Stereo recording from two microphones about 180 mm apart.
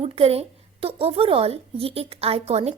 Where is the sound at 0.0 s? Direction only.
35° right (ahead or behind).